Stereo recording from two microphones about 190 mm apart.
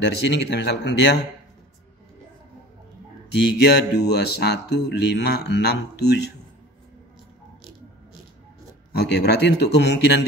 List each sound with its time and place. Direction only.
0.0 s speech: 60° left (ahead or behind)
3.3 s speech: 60° left (ahead or behind)
8.9 s speech: 60° left (ahead or behind)